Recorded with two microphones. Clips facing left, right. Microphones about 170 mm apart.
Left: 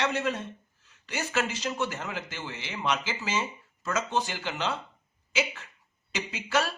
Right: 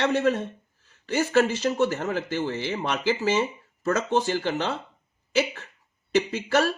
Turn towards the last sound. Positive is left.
turn(degrees=-55)  # may be behind; listen again after turning